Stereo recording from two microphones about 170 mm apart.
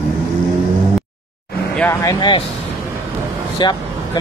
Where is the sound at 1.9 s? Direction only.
20° left (ahead or behind).